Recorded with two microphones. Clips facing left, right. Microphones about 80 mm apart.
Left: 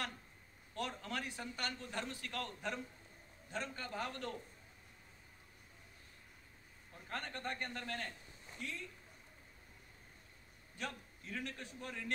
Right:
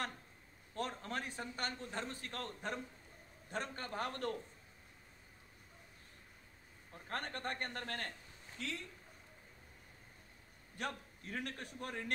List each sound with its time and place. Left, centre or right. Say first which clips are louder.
0.7 s a man's voice: right 1 dB; right
7.1 s a man's voice: right 2 dB; right
8.6 s speech: right 3 dB; right
10.8 s a man's voice: right 3 dB; right